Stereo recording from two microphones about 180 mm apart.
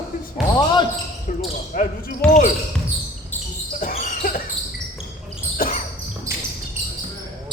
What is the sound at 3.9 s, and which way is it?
Basketball bounce, 50° left (ahead or behind).